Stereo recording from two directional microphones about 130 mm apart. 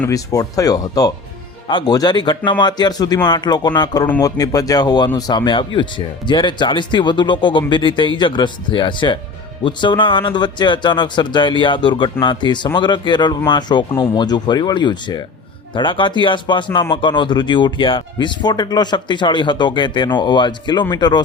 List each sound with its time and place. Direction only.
0.1 s speech: 25° left (ahead or behind)